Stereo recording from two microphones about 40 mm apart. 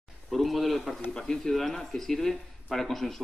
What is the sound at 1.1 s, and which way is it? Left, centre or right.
Speech, centre.